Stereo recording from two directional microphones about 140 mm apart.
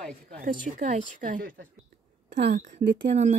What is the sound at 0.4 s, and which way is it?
Speech, 85° right.